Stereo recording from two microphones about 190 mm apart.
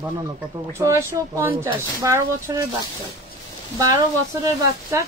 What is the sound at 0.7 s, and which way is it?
Speech, 15° right (ahead or behind).